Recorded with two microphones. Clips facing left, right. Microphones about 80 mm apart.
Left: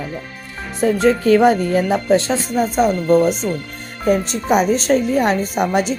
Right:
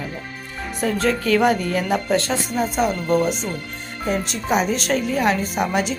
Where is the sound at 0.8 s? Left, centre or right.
Left.